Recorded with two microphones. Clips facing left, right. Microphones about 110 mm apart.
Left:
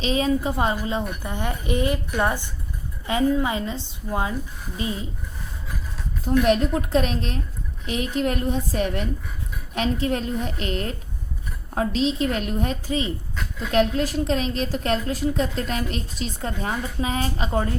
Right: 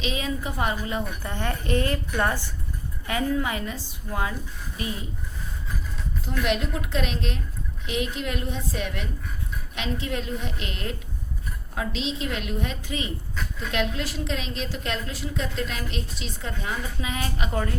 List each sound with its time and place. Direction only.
0.0 s a woman's voice: 35° left (ahead or behind)
6.4 s a woman's voice: 40° left (ahead or behind)